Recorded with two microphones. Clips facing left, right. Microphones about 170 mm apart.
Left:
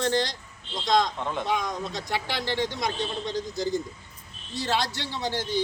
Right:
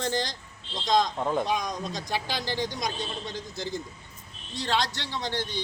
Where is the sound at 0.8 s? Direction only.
20° right (ahead or behind).